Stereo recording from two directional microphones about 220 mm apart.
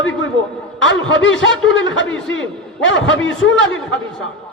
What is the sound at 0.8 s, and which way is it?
A man's voice, 55° left (ahead or behind).